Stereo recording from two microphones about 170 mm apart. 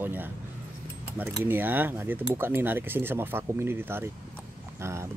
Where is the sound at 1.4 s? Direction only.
10° right (ahead or behind).